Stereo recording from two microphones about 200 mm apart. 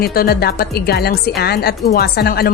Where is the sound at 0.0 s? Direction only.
50° left (ahead or behind).